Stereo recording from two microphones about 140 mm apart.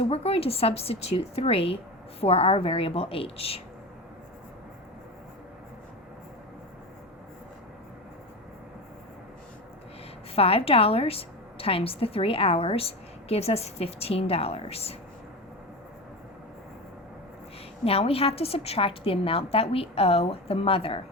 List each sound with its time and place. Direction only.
0.0 s a woman's voice: 45° left (ahead or behind)
10.3 s a woman's voice: 45° left (ahead or behind)
17.8 s a woman's voice: 45° left (ahead or behind)